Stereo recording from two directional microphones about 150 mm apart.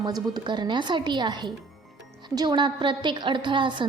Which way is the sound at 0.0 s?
30° right (ahead or behind).